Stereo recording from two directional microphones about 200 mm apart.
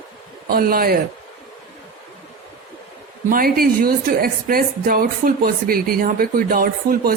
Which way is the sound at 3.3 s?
45° right (ahead or behind).